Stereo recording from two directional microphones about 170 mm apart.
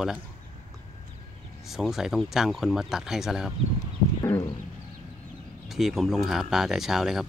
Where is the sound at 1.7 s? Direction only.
Centre (ahead or behind).